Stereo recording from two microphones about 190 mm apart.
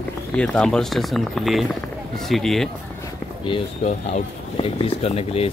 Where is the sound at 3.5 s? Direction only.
25° left (ahead or behind).